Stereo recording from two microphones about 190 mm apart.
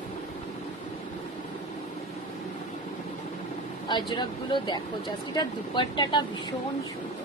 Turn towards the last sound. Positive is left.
turn(degrees=25)  # may be behind; listen again after turning